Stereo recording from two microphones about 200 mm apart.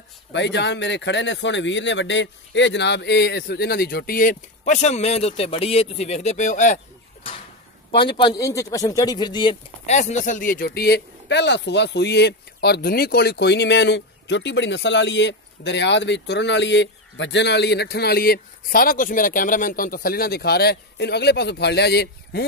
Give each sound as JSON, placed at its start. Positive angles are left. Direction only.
{"t": 0.3, "sound": "speech", "side_deg": 60}
{"t": 8.2, "sound": "speech", "side_deg": 20}